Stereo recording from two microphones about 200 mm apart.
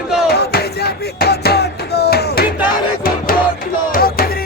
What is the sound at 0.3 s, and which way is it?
Music, 50° left (ahead or behind).